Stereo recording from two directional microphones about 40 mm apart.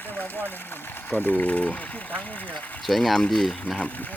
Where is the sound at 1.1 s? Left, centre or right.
Left.